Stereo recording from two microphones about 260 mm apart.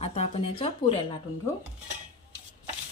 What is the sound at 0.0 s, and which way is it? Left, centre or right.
Speech, left.